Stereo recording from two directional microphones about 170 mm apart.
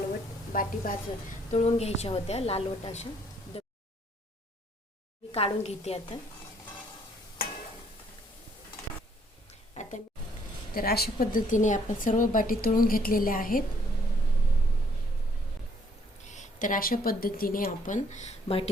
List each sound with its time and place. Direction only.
0.5 s speech: 55° left (ahead or behind)
1.5 s a woman's voice: 35° left (ahead or behind)
3.5 s a sound: 35° left (ahead or behind)
5.3 s a woman's voice: 35° left (ahead or behind)
9.8 s a sound: 45° left (ahead or behind)
10.8 s speech: 65° left (ahead or behind)
16.3 s speech: 50° left (ahead or behind)